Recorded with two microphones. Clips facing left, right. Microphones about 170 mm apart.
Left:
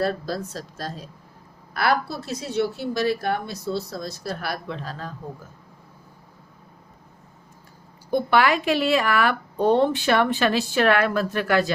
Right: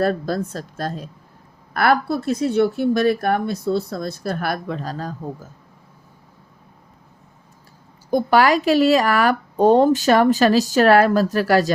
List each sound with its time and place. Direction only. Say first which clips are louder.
0.0 s speech: right 5 dB; 55° right (ahead or behind)
8.1 s speech: right 4 dB; 40° right (ahead or behind)